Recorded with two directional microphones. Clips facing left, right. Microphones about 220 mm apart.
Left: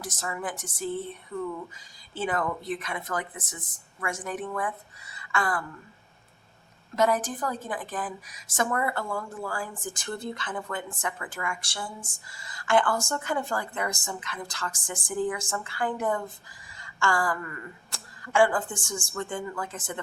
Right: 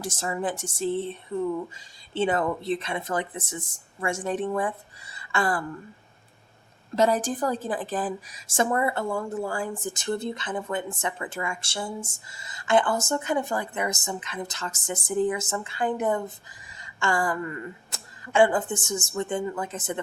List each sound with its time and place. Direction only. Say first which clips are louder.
0.0 s a woman's voice: right 5 dB; 30° right (ahead or behind)
6.9 s a woman's voice: right 2 dB; 30° right (ahead or behind)